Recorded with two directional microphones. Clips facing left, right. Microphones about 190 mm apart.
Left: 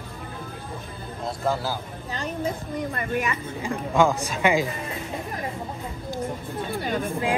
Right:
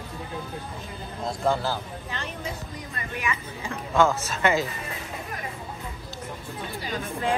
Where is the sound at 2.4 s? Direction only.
50° left (ahead or behind).